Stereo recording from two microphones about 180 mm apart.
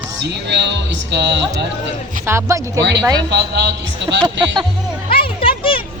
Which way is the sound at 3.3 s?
70° right (ahead or behind).